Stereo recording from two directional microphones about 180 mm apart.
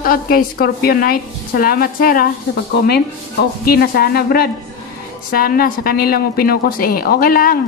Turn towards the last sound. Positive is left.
turn(degrees=55)  # may be behind; listen again after turning